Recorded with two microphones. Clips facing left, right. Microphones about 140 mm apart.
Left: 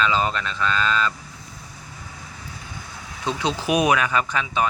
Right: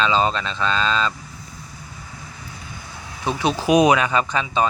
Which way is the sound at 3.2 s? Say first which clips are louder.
Right 3 dB; 15° right (ahead or behind).